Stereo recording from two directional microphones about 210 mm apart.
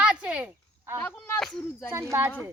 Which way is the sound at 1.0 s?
10° left (ahead or behind).